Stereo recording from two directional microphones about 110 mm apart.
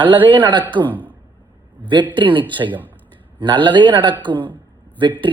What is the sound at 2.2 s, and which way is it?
Speech, 45° right (ahead or behind).